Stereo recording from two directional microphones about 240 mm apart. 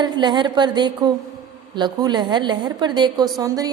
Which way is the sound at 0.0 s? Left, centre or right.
Centre.